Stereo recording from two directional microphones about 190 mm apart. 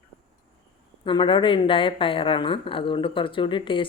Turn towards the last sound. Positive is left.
turn(degrees=25)  # may be behind; listen again after turning